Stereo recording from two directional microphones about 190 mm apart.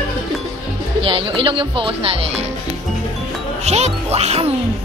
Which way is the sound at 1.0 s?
30° right (ahead or behind).